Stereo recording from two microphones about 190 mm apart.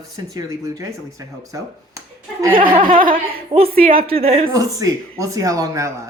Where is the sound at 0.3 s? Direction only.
20° right (ahead or behind).